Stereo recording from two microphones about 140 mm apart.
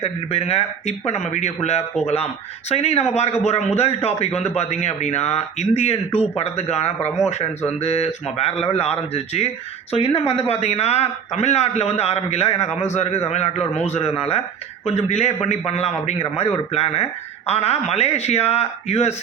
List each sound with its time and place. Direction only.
0.0 s speech: 45° left (ahead or behind)